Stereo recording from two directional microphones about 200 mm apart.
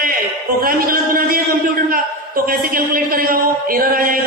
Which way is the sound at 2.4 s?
45° right (ahead or behind).